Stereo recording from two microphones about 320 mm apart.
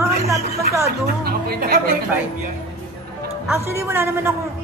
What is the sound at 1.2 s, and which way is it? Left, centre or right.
Speech, right.